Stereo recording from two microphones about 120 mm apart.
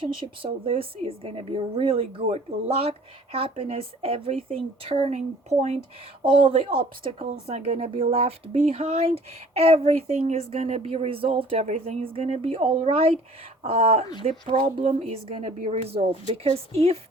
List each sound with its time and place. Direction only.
0.0 s a woman's voice: 45° right (ahead or behind); by 5.7 s 65° right (ahead or behind)
6.2 s a woman's voice: 45° right (ahead or behind)
14.8 s a woman's voice: 70° right (ahead or behind)